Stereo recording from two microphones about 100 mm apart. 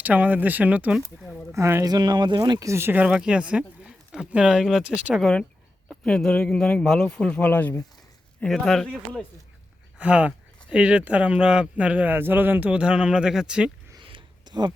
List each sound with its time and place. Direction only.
0.0 s speech: 15° right (ahead or behind)
1.5 s speech: 30° right (ahead or behind)
1.9 s speech: 45° right (ahead or behind)
2.6 s speech: 25° right (ahead or behind)
2.9 s speech: 10° right (ahead or behind)
5.2 s speech: 10° left (ahead or behind)
8.4 s speech: 5° left (ahead or behind)
10.0 s speech: 15° right (ahead or behind)
14.0 s a sound: 60° right (ahead or behind)